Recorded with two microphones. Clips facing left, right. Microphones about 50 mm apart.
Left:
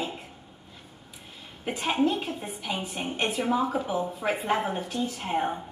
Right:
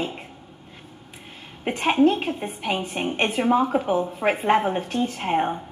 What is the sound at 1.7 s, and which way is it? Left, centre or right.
A woman's voice, right.